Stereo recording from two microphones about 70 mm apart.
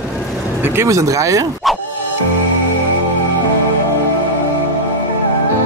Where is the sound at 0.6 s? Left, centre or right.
Right.